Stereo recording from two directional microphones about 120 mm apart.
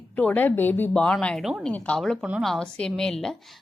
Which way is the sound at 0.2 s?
15° left (ahead or behind).